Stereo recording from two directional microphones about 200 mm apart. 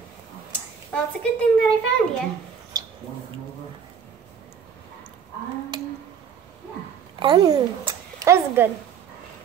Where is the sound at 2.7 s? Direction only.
20° right (ahead or behind).